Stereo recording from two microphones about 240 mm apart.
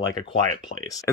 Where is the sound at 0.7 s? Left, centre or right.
Left.